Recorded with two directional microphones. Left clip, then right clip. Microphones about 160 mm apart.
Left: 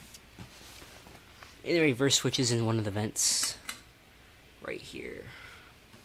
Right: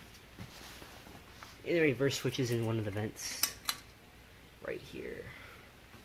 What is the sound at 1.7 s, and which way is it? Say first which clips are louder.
Speech: left 4 dB; 55° left (ahead or behind).